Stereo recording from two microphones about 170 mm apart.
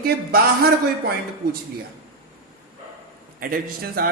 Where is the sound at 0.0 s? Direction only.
65° right (ahead or behind).